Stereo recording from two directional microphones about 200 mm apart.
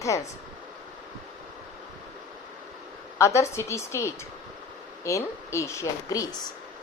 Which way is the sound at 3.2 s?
15° left (ahead or behind).